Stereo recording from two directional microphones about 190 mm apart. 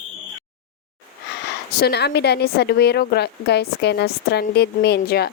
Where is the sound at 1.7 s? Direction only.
60° left (ahead or behind).